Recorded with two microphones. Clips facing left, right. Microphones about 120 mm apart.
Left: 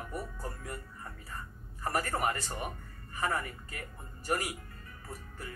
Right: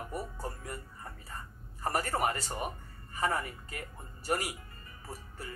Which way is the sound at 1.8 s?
30° right (ahead or behind).